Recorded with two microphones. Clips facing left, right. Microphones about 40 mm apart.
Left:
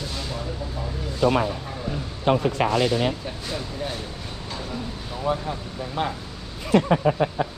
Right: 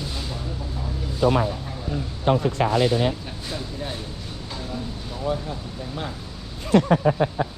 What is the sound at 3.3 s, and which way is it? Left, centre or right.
Speech, centre.